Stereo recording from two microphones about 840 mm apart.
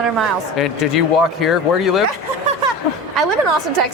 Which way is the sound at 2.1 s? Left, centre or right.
Right.